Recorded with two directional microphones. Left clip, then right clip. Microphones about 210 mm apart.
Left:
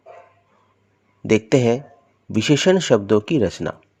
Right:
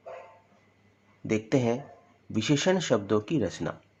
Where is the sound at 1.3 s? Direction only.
35° left (ahead or behind).